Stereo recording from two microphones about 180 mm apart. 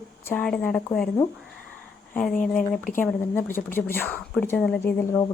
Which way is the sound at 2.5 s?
Centre (ahead or behind).